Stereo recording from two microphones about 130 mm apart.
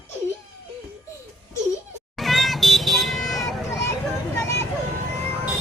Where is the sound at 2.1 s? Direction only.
Centre (ahead or behind).